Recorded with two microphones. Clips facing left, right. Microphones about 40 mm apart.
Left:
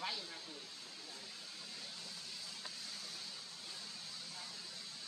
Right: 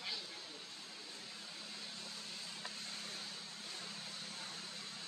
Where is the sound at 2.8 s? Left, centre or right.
Right.